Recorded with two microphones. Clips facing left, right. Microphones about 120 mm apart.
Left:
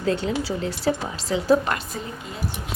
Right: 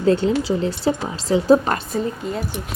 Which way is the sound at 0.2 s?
30° right (ahead or behind).